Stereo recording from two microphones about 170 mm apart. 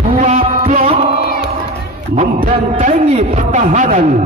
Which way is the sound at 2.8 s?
45° right (ahead or behind).